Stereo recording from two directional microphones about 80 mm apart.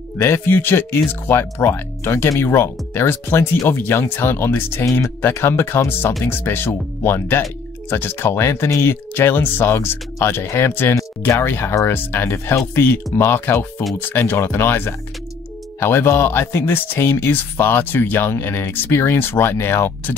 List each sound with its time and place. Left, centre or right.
0.2 s speech: left